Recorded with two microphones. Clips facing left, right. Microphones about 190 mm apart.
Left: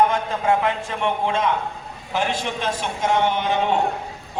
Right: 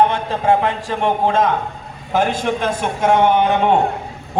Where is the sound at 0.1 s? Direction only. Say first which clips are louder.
Right 4 dB; 35° right (ahead or behind).